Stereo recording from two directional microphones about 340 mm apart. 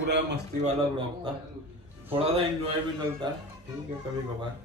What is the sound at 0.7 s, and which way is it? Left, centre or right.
A man's voice, centre.